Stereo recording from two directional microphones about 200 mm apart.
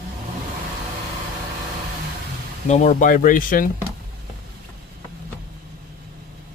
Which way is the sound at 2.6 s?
35° left (ahead or behind).